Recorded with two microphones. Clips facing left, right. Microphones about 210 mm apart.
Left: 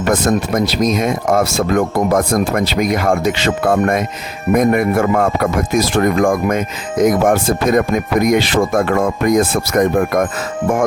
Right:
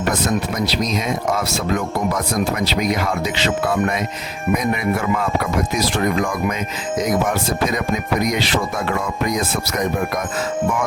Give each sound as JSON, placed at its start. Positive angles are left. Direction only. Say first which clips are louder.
{"t": 0.1, "sound": "speech", "louder": "left 7 dB", "side_deg": 50}